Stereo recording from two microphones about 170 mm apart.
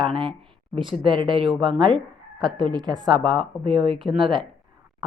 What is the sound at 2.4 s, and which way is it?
Speech, 25° right (ahead or behind).